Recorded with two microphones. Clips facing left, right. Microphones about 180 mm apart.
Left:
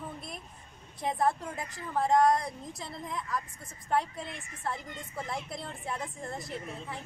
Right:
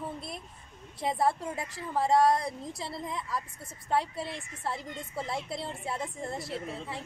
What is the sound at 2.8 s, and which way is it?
Speech, 30° right (ahead or behind).